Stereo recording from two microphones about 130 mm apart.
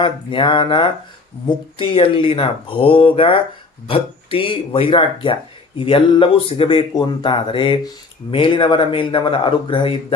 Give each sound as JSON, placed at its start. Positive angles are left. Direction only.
{"t": 0.0, "sound": "speech", "side_deg": 40}